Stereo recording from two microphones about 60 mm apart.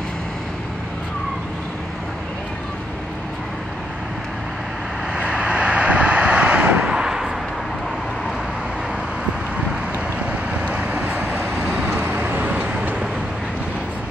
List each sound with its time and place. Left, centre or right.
5.1 s vehicle: centre
6.9 s a sound: centre
10.5 s vehicle: right